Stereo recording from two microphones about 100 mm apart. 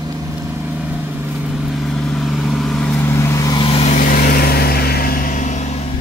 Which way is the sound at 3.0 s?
25° left (ahead or behind).